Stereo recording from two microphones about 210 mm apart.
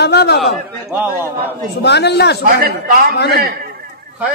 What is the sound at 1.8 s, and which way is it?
Speech, 55° left (ahead or behind).